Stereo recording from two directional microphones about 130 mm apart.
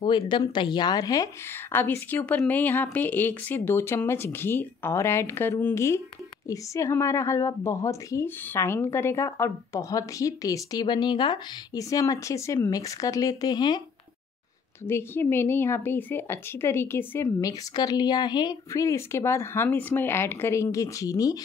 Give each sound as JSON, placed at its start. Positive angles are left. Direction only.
{"t": 0.3, "sound": "a woman's voice", "side_deg": 35}
{"t": 1.5, "sound": "a woman's voice", "side_deg": 15}
{"t": 14.9, "sound": "a woman's voice", "side_deg": 15}